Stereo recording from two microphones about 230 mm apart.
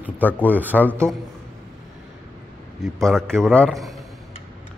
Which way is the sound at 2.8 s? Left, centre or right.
Centre.